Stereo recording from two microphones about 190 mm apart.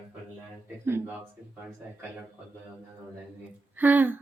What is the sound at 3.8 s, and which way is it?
Speech, 10° right (ahead or behind).